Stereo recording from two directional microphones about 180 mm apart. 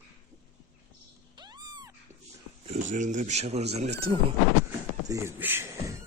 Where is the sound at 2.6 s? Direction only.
40° right (ahead or behind).